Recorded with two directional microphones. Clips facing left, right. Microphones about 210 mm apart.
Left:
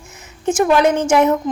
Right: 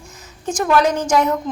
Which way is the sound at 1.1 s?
10° left (ahead or behind).